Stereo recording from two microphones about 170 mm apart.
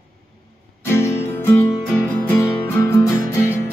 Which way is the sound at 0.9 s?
15° left (ahead or behind).